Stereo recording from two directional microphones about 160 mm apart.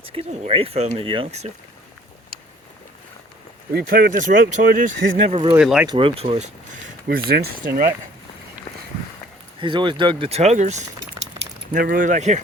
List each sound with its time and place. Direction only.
0.0 s speech: 35° right (ahead or behind)
3.7 s speech: 70° right (ahead or behind)
5.3 s speech: 35° right (ahead or behind)
5.5 s speech: 5° right (ahead or behind)
5.8 s speech: 30° right (ahead or behind)
7.1 s speech: 75° right (ahead or behind)
9.6 s speech: 30° right (ahead or behind); by 10.8 s 45° right (ahead or behind)
11.7 s speech: 60° right (ahead or behind)